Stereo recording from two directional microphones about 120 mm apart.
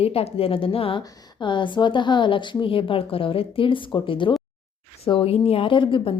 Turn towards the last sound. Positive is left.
turn(degrees=45)  # may be behind; listen again after turning